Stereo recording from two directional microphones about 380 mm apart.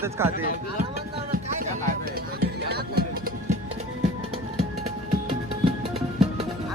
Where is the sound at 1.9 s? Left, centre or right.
Right.